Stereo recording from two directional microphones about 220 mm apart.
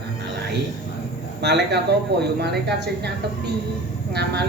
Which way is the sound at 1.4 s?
50° right (ahead or behind).